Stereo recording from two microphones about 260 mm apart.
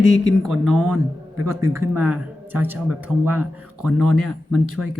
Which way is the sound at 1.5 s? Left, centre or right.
Centre.